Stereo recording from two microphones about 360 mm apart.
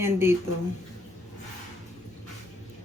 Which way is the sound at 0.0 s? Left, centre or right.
Centre.